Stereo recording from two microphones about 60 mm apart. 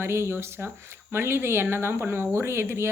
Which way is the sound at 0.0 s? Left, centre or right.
Right.